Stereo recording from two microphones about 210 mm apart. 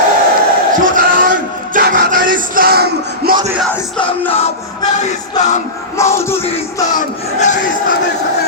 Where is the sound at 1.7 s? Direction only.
45° right (ahead or behind).